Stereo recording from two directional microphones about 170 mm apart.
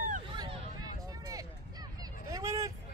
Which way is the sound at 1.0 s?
20° right (ahead or behind).